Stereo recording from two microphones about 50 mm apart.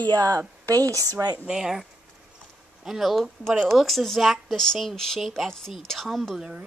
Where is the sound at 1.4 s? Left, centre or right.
Centre.